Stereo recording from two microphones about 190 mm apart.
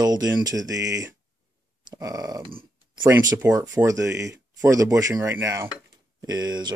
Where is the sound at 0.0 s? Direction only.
20° right (ahead or behind).